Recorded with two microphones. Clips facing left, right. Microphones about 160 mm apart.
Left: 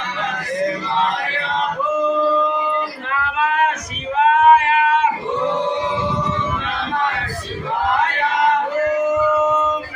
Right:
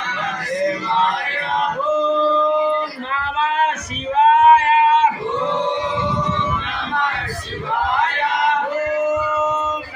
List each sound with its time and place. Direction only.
4.2 s male singing: 25° right (ahead or behind)